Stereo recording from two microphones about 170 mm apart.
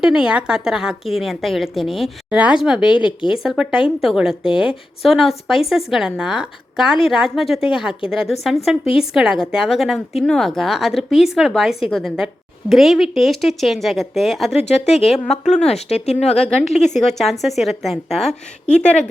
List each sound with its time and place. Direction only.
0.0 s a woman's voice: 5° right (ahead or behind)
14.6 s speech: 40° left (ahead or behind)
15.0 s speech: centre (ahead or behind)
15.6 s speech: 40° left (ahead or behind)
16.4 s speech: centre (ahead or behind)